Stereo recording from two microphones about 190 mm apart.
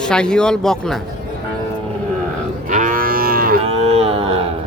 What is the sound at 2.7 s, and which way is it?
Livestock, 45° right (ahead or behind).